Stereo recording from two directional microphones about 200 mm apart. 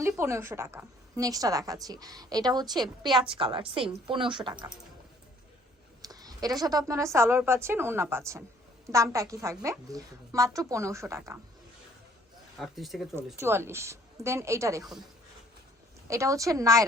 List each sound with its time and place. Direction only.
0.0 s a woman's voice: 10° right (ahead or behind)
6.0 s a woman's voice: 20° right (ahead or behind)
12.5 s speech: centre (ahead or behind)
13.4 s a woman's voice: 15° right (ahead or behind)
16.0 s a woman's voice: 15° right (ahead or behind)